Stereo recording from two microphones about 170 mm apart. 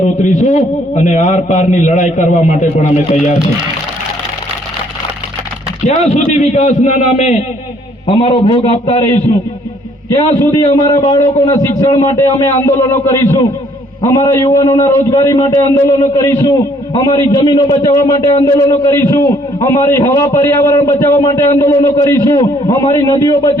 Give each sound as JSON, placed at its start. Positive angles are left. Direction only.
{"t": 0.0, "sound": "a man's voice", "side_deg": 45}
{"t": 5.9, "sound": "a man's voice", "side_deg": 40}
{"t": 8.0, "sound": "a man's voice", "side_deg": 30}
{"t": 10.8, "sound": "a man's voice", "side_deg": 20}